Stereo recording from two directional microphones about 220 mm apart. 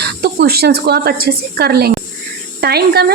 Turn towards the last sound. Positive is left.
turn(degrees=-45)  # may be behind; listen again after turning